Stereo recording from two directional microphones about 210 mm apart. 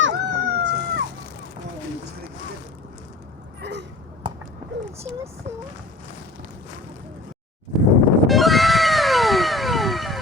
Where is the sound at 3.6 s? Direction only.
55° right (ahead or behind).